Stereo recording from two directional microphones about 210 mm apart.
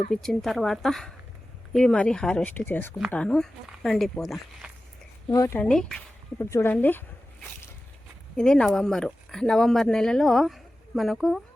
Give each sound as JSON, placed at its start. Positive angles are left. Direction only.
{"t": 0.1, "sound": "speech", "side_deg": 0}
{"t": 5.3, "sound": "speech", "side_deg": 15}
{"t": 8.4, "sound": "speech", "side_deg": 5}